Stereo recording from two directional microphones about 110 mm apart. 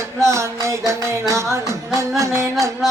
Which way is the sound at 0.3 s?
25° right (ahead or behind).